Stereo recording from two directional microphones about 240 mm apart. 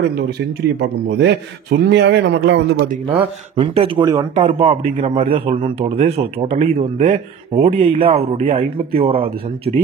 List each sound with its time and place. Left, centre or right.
0.0 s a man's voice: right
3.1 s a man's voice: right
8.0 s speech: right